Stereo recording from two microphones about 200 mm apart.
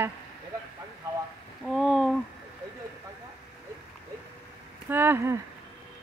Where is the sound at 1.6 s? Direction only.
Centre (ahead or behind).